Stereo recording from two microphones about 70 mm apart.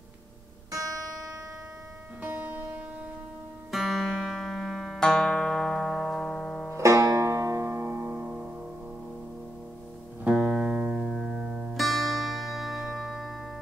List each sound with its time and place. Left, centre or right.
0.7 s music: right
2.2 s music: right
3.7 s music: centre
6.8 s banjo: right
7.2 s music: right
10.2 s music: centre
11.7 s music: centre